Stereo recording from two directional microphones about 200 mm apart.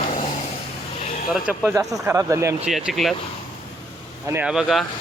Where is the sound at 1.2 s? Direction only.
5° right (ahead or behind).